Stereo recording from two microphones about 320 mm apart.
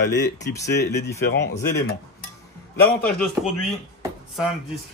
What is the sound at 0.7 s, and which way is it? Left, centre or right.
Speech, left.